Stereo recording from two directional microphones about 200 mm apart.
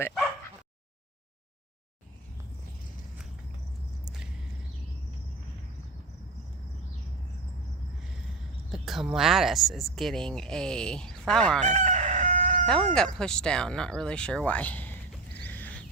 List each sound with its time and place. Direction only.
8.7 s speech: centre (ahead or behind)
11.6 s crowing: 35° right (ahead or behind)
12.6 s speech: 5° left (ahead or behind)
15.4 s a sound: 10° left (ahead or behind)